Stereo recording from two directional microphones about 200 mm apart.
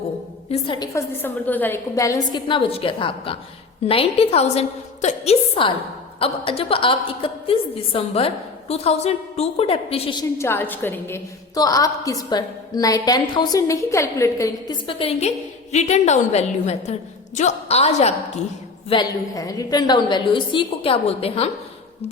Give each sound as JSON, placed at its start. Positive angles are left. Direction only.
{"t": 0.5, "sound": "a woman's voice", "side_deg": 20}
{"t": 1.2, "sound": "a woman's voice", "side_deg": 10}
{"t": 10.3, "sound": "a woman's voice", "side_deg": 10}
{"t": 18.9, "sound": "a woman's voice", "side_deg": 20}